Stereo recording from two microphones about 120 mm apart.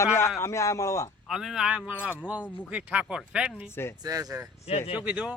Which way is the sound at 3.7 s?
20° left (ahead or behind).